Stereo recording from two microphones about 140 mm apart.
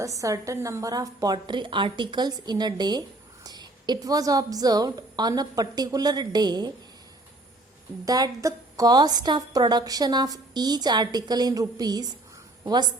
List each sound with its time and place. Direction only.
0.0 s a woman's voice: 25° right (ahead or behind)
8.0 s a woman's voice: 25° right (ahead or behind)